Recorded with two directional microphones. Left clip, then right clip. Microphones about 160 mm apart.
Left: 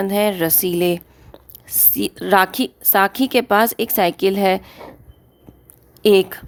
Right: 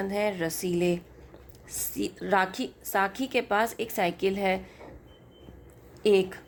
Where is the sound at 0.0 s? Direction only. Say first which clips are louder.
Left 10 dB; 60° left (ahead or behind).